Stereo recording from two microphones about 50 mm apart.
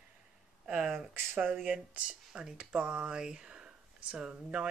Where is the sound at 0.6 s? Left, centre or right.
Centre.